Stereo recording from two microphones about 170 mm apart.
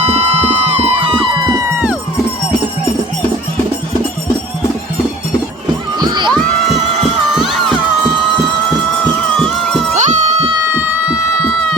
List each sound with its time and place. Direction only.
0.1 s music: 35° right (ahead or behind)
1.4 s music: 25° right (ahead or behind)
6.0 s crowd: 25° right (ahead or behind)
7.3 s music: centre (ahead or behind)
9.9 s a sound: 45° right (ahead or behind)
10.7 s a sound: 10° right (ahead or behind)